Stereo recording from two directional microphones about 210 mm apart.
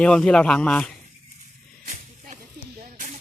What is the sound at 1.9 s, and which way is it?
Snake, 35° right (ahead or behind).